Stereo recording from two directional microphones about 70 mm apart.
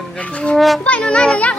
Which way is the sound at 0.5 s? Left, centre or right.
Centre.